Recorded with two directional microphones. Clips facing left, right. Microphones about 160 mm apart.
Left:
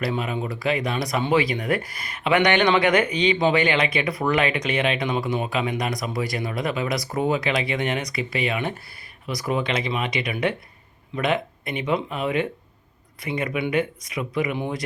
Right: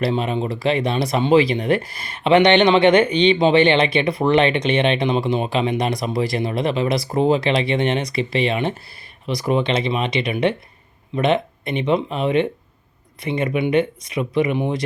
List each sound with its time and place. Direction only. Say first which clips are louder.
0.0 s speech: right 5 dB; 30° right (ahead or behind)